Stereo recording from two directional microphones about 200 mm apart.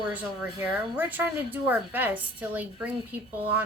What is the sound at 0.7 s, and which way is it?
A woman's voice, 10° right (ahead or behind).